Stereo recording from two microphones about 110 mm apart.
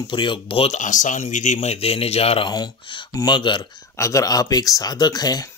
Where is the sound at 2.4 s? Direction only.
40° left (ahead or behind).